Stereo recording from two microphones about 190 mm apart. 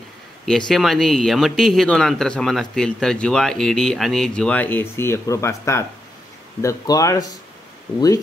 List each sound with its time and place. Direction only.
0.5 s speech: centre (ahead or behind); by 7.3 s 20° left (ahead or behind)